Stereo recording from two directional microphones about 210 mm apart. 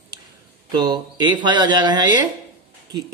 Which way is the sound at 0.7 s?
20° right (ahead or behind).